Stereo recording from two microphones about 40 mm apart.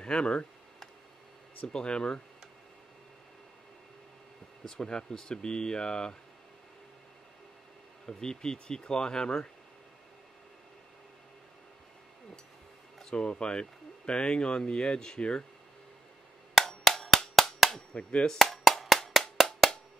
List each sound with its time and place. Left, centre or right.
0.0 s speech: left
1.7 s speech: left
4.6 s speech: centre
8.1 s speech: centre
13.1 s speech: left
16.5 s percussion: centre
18.2 s speech: centre
18.5 s wood block: centre
19.4 s music: centre